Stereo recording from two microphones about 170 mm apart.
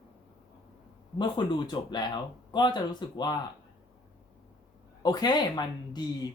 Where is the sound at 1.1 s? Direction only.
25° left (ahead or behind).